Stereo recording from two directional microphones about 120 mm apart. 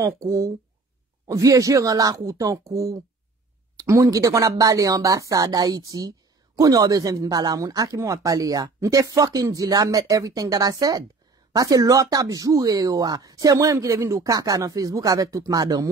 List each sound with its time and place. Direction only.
0.0 s speech: 25° right (ahead or behind)